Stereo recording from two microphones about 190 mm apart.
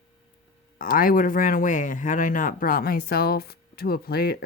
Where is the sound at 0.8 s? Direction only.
45° left (ahead or behind).